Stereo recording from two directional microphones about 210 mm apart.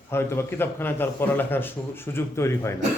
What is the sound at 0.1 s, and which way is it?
Speech, 10° left (ahead or behind).